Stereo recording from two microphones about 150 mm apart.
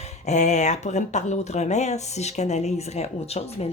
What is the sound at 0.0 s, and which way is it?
Speech, 50° left (ahead or behind).